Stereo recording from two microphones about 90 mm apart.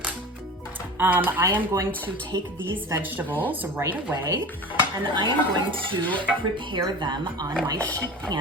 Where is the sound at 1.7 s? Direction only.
35° right (ahead or behind).